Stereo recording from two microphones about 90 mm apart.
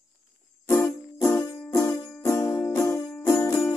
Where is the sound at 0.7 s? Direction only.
35° left (ahead or behind).